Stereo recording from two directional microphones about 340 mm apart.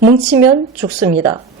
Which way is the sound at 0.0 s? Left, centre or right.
Centre.